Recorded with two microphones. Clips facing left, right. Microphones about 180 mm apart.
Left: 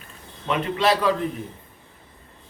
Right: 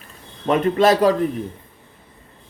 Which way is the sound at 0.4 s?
45° right (ahead or behind).